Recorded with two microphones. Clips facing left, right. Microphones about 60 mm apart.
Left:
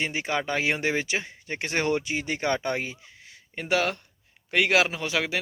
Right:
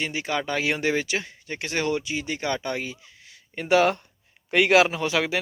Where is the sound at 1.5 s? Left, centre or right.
Left.